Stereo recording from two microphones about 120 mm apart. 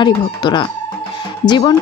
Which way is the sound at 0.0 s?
40° left (ahead or behind).